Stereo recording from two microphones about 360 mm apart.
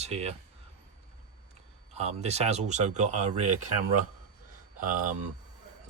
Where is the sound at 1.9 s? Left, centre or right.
Centre.